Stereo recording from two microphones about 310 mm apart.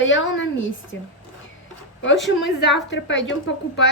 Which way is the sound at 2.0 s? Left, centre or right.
Left.